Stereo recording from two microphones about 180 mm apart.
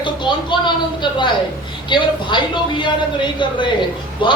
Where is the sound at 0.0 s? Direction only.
25° left (ahead or behind).